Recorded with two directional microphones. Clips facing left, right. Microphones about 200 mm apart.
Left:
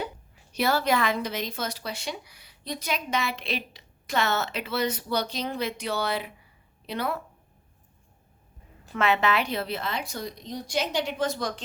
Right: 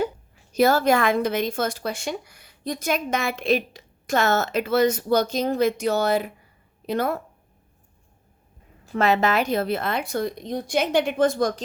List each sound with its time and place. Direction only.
0.5 s a woman's voice: 45° right (ahead or behind)
8.9 s a woman's voice: 40° right (ahead or behind)